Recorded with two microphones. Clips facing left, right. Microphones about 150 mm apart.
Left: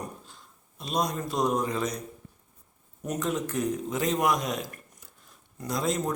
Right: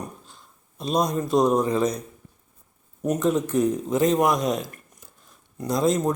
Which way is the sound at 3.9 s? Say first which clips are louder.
Right 9 dB; 40° right (ahead or behind).